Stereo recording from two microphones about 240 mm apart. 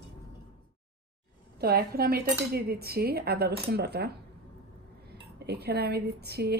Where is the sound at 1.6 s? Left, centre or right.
Right.